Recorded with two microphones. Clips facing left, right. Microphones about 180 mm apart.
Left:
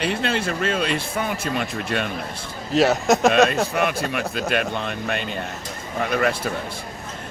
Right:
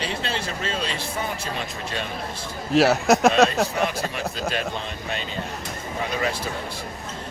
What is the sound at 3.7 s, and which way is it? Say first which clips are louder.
Speech: left 3 dB; 60° left (ahead or behind).